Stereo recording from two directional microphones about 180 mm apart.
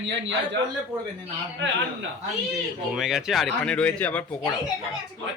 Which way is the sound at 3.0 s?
Centre (ahead or behind).